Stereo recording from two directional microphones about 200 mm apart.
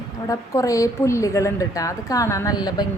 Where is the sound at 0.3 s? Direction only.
15° left (ahead or behind).